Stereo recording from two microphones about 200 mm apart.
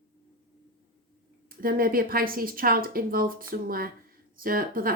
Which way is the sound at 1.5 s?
45° right (ahead or behind).